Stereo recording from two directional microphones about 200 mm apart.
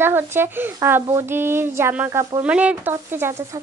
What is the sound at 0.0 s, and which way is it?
Speech, 10° right (ahead or behind).